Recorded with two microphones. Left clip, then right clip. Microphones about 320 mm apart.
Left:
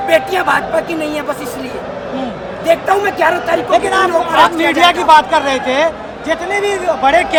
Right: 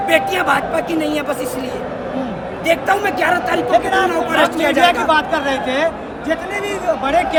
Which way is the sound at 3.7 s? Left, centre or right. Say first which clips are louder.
Left 3 dB; centre.